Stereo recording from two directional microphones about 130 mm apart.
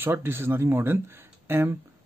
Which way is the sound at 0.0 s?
15° right (ahead or behind).